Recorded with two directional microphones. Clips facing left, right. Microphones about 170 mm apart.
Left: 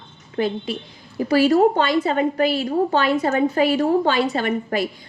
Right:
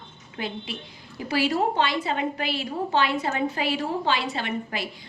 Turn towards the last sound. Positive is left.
turn(degrees=45)  # may be behind; listen again after turning